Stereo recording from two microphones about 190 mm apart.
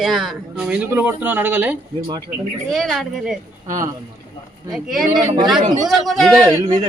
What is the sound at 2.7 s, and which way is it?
Speech, centre (ahead or behind).